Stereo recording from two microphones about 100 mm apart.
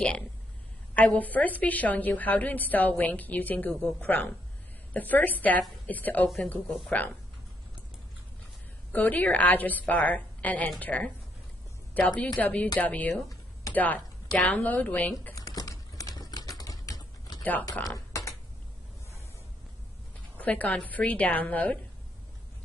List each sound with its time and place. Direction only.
0.9 s a woman's voice: 15° left (ahead or behind)
6.2 s speech: 5° left (ahead or behind)
6.9 s a woman's voice: 15° left (ahead or behind)
8.9 s a woman's voice: 15° left (ahead or behind)
15.3 s typing: 35° left (ahead or behind)
17.4 s a sound: 15° left (ahead or behind)
17.8 s a sound: 35° left (ahead or behind)
20.3 s a woman's voice: 15° left (ahead or behind)